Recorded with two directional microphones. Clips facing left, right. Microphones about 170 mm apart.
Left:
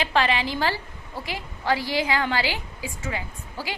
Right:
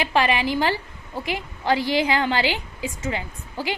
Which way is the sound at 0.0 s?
15° right (ahead or behind).